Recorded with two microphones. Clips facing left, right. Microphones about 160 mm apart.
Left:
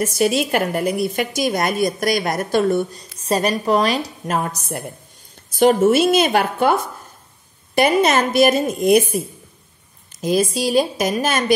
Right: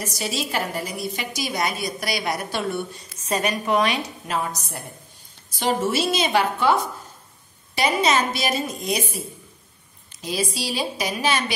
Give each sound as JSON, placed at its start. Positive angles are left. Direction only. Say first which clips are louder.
{"t": 0.0, "sound": "a woman's voice", "louder": "left 10 dB", "side_deg": 55}
{"t": 4.3, "sound": "a woman's voice", "louder": "left 5 dB", "side_deg": 50}
{"t": 10.2, "sound": "a woman's voice", "louder": "left 9 dB", "side_deg": 50}